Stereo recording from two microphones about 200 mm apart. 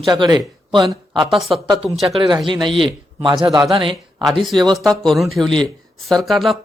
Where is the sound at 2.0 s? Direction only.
25° right (ahead or behind).